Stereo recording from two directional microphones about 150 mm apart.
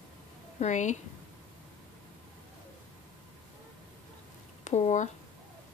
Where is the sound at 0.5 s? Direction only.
50° left (ahead or behind).